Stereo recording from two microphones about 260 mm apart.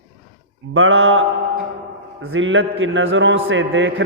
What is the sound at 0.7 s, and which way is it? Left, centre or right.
A man's voice, right.